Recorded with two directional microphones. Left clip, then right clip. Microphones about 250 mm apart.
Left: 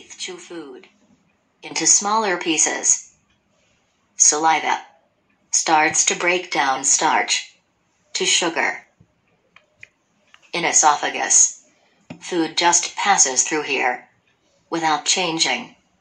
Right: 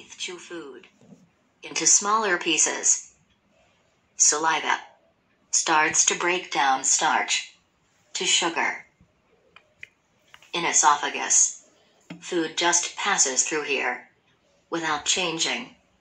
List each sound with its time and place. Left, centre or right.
0.2 s speech: left
4.3 s speech: left
10.5 s speech: left